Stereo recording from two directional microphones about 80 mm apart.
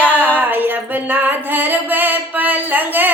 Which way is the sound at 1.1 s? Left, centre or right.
Right.